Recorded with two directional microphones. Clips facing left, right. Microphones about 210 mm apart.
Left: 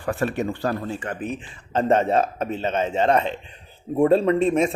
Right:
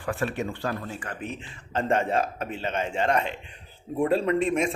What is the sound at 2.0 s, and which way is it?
Speech, 40° left (ahead or behind).